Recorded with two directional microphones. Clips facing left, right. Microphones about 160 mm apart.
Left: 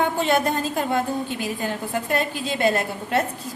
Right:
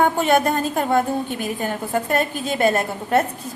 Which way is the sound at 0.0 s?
50° right (ahead or behind).